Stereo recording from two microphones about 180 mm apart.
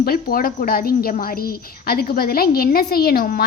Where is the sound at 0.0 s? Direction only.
55° left (ahead or behind).